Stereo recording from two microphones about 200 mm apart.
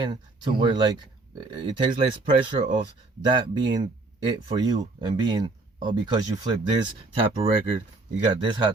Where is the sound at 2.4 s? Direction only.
25° right (ahead or behind).